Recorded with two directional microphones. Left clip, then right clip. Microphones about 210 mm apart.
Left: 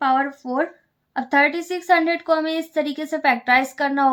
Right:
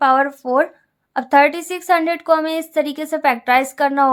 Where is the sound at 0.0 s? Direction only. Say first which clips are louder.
Right 5 dB; 45° right (ahead or behind).